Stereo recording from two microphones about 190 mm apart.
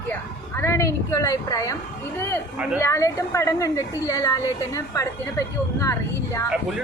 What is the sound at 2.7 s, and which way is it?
A woman's voice, 15° left (ahead or behind).